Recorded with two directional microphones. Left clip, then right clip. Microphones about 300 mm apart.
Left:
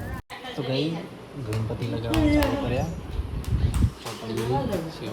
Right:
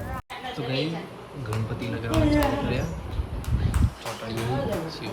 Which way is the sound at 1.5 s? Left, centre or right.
Centre.